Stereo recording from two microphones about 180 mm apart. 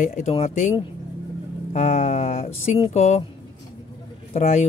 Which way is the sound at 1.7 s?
45° left (ahead or behind).